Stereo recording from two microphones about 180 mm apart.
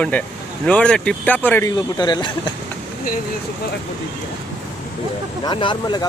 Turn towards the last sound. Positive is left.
turn(degrees=25)  # may be behind; listen again after turning